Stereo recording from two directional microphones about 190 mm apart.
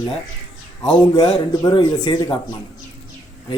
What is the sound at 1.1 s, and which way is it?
Speech, 20° left (ahead or behind).